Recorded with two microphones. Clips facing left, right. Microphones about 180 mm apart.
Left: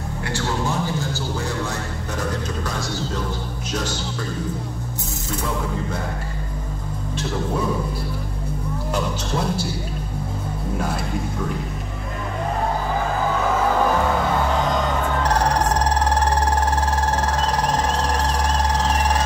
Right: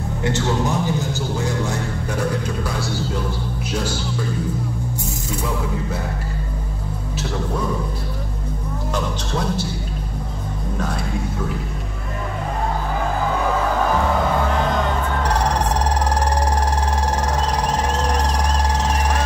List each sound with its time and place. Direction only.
0.2 s a man's voice: 20° right (ahead or behind)